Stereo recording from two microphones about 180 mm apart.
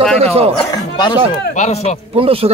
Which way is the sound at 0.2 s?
35° right (ahead or behind).